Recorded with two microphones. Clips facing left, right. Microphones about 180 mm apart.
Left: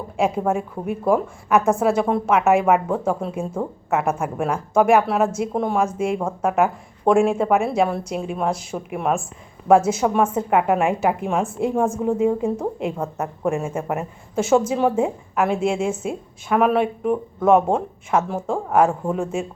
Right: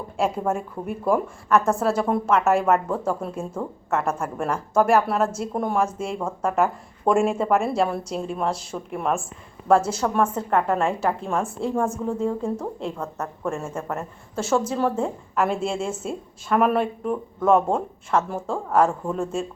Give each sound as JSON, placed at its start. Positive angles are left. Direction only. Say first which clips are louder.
{"t": 0.2, "sound": "a woman's voice", "louder": "left 3 dB", "side_deg": 10}
{"t": 4.9, "sound": "speech", "louder": "left 3 dB", "side_deg": 0}
{"t": 5.8, "sound": "a woman's voice", "louder": "left 4 dB", "side_deg": 15}
{"t": 7.1, "sound": "a woman's voice", "louder": "left 3 dB", "side_deg": 0}